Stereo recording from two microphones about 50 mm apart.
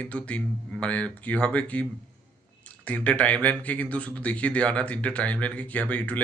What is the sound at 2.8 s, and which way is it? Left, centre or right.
Speech, left.